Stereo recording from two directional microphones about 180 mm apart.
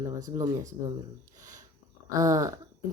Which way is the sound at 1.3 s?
45° right (ahead or behind).